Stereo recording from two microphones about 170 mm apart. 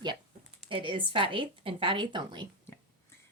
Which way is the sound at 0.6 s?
30° right (ahead or behind).